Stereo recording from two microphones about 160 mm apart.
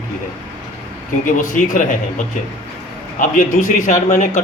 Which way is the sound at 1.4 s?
55° left (ahead or behind).